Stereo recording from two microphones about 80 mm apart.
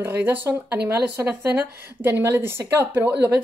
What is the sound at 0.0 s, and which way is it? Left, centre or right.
A woman's voice, right.